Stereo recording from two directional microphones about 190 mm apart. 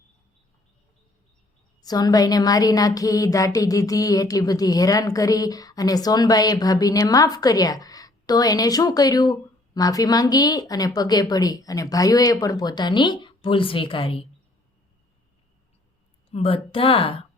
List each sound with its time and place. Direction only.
1.8 s speech: 20° left (ahead or behind)
16.3 s speech: 30° left (ahead or behind)